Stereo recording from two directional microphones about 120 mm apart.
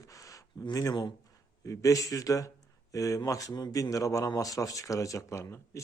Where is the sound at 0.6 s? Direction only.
30° left (ahead or behind).